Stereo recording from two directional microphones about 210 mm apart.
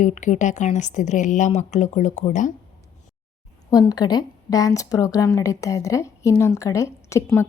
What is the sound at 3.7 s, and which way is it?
Speech, 20° left (ahead or behind).